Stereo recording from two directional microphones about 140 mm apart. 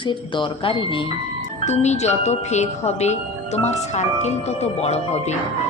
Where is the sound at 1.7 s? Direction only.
55° left (ahead or behind).